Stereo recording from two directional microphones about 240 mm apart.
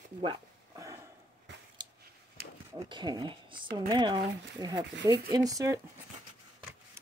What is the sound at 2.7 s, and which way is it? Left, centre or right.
Speech, centre.